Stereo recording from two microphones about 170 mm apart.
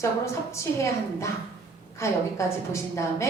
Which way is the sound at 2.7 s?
15° left (ahead or behind).